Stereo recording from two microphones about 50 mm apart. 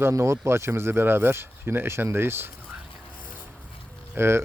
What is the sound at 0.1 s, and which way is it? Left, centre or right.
Speech, right.